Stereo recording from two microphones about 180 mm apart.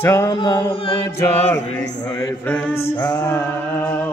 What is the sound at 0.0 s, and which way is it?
Mantra, 20° left (ahead or behind).